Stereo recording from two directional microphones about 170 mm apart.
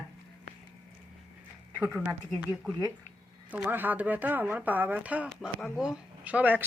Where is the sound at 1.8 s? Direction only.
10° right (ahead or behind).